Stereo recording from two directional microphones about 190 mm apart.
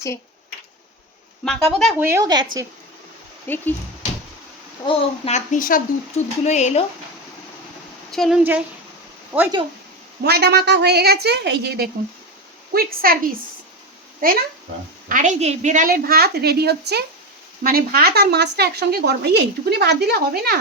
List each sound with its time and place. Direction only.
1.5 s speech: centre (ahead or behind)
2.0 s a woman's voice: 15° right (ahead or behind)
3.4 s speech: 10° left (ahead or behind)
4.9 s a woman's voice: 30° left (ahead or behind)
8.1 s speech: centre (ahead or behind)
9.3 s a woman's voice: 10° right (ahead or behind)
10.2 s a woman's voice: 60° right (ahead or behind)